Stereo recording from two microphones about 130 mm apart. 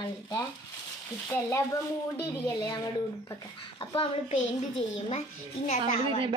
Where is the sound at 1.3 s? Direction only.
20° left (ahead or behind).